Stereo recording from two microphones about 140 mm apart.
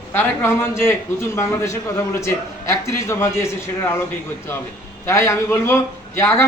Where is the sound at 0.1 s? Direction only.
20° left (ahead or behind).